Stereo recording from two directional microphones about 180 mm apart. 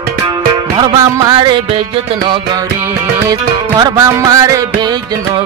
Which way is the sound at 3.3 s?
20° right (ahead or behind).